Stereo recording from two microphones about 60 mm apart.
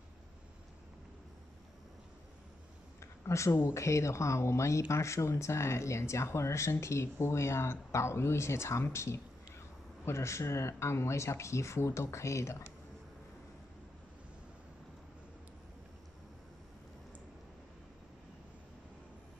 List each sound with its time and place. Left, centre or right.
3.0 s a sound: left
3.5 s speech: left
3.8 s speech: left